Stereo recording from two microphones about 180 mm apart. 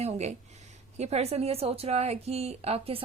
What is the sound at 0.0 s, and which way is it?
Speech, 35° right (ahead or behind).